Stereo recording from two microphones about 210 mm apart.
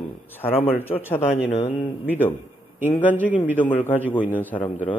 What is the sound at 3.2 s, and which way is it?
Speech, 10° right (ahead or behind).